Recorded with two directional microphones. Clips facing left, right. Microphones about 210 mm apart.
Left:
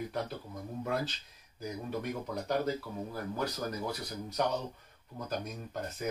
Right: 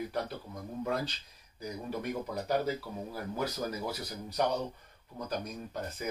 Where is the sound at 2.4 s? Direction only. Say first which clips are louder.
Even; 5° right (ahead or behind).